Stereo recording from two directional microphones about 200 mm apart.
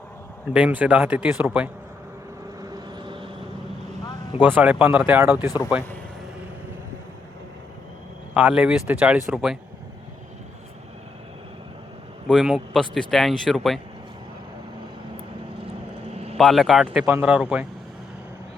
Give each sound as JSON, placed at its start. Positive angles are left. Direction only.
{"t": 0.5, "sound": "a man's voice", "side_deg": -5}
{"t": 2.6, "sound": "vehicle", "side_deg": -25}
{"t": 4.4, "sound": "a man's voice", "side_deg": -10}
{"t": 5.5, "sound": "speech", "side_deg": 20}
{"t": 8.3, "sound": "speech", "side_deg": -5}
{"t": 12.3, "sound": "speech", "side_deg": -5}
{"t": 16.1, "sound": "vehicle", "side_deg": -30}
{"t": 16.4, "sound": "speech", "side_deg": 0}